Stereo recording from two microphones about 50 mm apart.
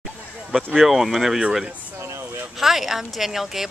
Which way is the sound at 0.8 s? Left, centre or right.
Centre.